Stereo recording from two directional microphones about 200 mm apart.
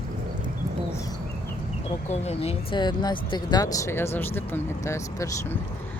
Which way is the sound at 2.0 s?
30° left (ahead or behind).